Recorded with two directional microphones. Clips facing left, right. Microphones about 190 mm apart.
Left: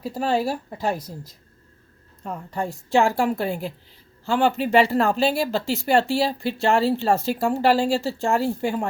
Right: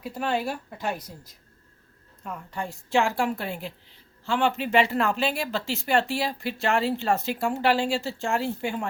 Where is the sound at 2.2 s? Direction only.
35° left (ahead or behind).